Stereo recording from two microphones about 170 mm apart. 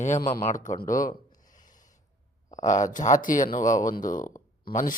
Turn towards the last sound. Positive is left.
turn(degrees=50)  # may be behind; listen again after turning